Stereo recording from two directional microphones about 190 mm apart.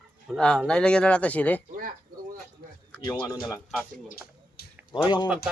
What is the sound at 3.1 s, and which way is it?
Speech, 20° left (ahead or behind).